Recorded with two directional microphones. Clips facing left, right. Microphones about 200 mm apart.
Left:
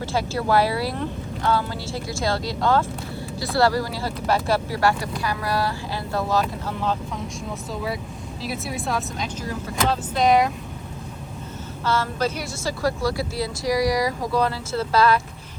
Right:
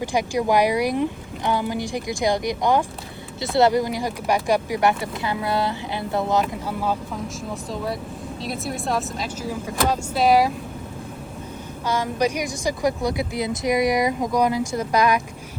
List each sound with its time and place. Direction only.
0.0 s speech: 15° right (ahead or behind)
8.4 s speech: centre (ahead or behind)
11.9 s speech: 15° right (ahead or behind)